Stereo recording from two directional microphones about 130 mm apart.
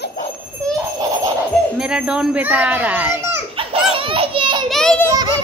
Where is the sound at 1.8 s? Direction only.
5° right (ahead or behind).